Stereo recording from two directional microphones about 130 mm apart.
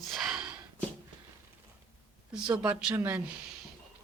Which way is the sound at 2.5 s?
10° right (ahead or behind).